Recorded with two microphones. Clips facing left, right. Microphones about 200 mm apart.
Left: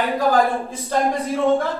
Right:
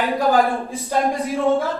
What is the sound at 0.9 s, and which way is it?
Speech, 10° right (ahead or behind).